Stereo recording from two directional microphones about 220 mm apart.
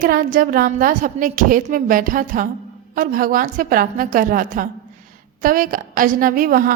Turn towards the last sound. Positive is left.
turn(degrees=-40)  # may be behind; listen again after turning